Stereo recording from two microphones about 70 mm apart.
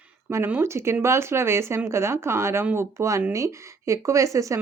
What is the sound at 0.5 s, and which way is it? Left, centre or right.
A woman's voice, right.